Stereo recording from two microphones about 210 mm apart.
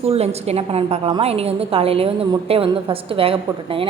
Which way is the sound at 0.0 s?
30° right (ahead or behind).